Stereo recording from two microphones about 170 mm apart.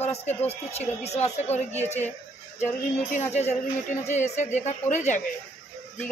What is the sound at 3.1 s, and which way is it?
A man's voice, 40° left (ahead or behind).